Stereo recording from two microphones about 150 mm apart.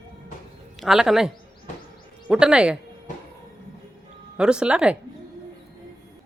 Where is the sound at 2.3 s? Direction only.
5° right (ahead or behind).